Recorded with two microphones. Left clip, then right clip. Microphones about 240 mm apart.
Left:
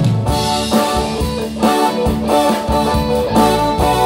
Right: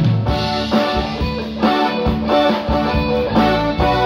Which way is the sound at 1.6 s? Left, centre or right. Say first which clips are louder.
Left 2 dB; left.